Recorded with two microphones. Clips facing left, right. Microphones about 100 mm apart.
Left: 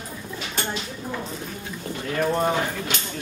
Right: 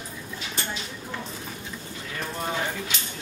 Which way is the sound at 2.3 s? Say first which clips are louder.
Left 6 dB; 55° left (ahead or behind).